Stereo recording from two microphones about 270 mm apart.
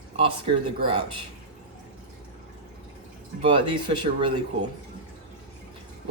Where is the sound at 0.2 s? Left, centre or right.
Centre.